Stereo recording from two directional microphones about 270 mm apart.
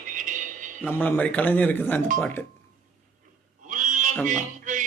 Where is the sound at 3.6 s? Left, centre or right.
Right.